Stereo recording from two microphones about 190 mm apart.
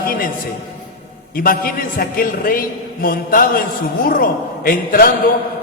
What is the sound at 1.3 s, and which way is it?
A man's voice, 50° left (ahead or behind).